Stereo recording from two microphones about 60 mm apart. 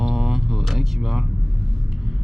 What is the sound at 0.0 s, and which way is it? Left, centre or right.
Vehicle, centre.